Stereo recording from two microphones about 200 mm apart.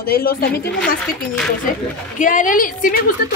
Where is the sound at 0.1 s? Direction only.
50° left (ahead or behind).